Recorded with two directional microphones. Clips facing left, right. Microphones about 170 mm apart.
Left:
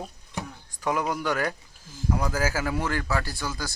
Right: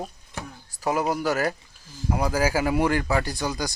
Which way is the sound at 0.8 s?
40° right (ahead or behind).